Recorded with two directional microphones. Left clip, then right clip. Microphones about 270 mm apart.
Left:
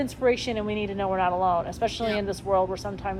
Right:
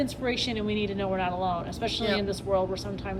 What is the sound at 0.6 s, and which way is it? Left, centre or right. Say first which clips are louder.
Speech: left 1 dB; right.